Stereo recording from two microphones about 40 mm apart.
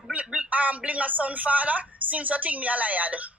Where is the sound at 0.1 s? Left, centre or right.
Right.